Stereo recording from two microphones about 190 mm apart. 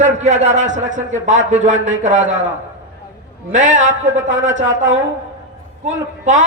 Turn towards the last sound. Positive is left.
turn(degrees=-40)  # may be behind; listen again after turning